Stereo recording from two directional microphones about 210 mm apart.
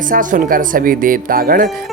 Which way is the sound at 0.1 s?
40° right (ahead or behind).